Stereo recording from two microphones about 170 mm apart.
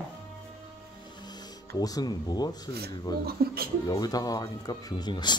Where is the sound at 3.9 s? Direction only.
20° left (ahead or behind).